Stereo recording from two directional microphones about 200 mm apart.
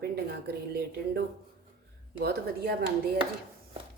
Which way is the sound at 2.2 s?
55° right (ahead or behind).